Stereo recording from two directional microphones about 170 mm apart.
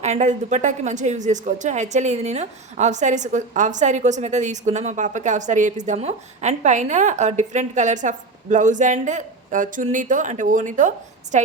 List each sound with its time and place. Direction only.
0.0 s a woman's voice: 45° right (ahead or behind)